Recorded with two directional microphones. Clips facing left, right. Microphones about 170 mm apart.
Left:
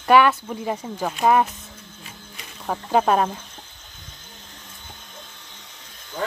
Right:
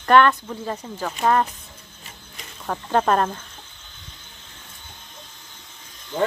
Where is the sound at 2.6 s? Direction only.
10° left (ahead or behind).